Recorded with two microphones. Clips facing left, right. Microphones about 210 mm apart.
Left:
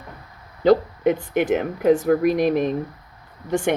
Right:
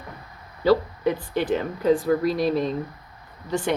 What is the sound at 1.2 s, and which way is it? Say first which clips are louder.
Speech: left 4 dB; 20° left (ahead or behind).